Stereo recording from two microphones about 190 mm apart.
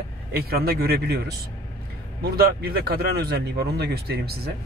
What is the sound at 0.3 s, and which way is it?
Speech, 55° right (ahead or behind).